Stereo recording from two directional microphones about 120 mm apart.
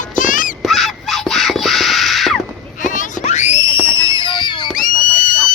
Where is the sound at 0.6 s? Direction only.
Centre (ahead or behind).